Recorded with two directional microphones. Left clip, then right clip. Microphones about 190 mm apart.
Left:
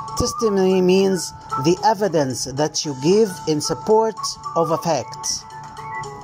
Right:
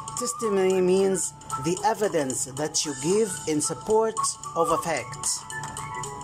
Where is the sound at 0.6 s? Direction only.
15° left (ahead or behind).